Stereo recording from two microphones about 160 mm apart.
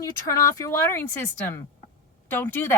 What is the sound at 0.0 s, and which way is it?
Speech, 20° left (ahead or behind).